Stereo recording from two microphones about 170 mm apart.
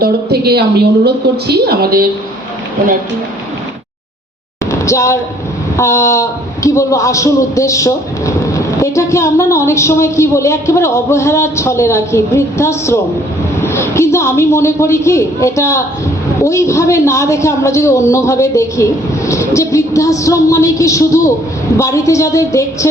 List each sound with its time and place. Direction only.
0.0 s a woman's voice: 70° right (ahead or behind)
4.7 s a man's voice: 15° left (ahead or behind)